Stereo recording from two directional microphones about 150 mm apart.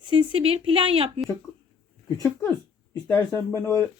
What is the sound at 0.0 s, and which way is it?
Speech, 35° right (ahead or behind).